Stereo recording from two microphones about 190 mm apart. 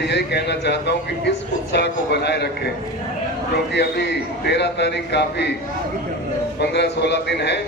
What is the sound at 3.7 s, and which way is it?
A man's voice, 65° left (ahead or behind).